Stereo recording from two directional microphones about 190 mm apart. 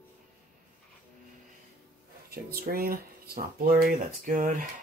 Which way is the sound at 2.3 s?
50° right (ahead or behind).